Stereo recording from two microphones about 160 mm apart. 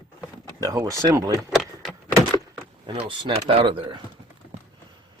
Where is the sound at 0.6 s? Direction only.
20° right (ahead or behind).